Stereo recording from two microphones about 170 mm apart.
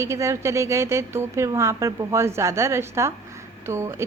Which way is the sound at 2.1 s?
15° right (ahead or behind).